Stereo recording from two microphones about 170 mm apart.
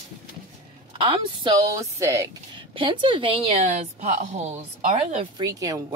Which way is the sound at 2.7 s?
30° right (ahead or behind).